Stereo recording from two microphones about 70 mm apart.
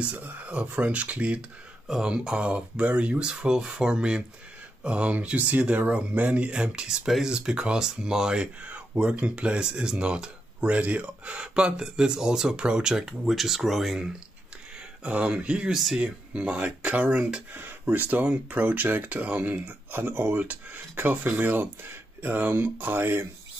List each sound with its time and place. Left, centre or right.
0.0 s speech: right; by 14.1 s centre
15.0 s speech: centre; by 23.2 s right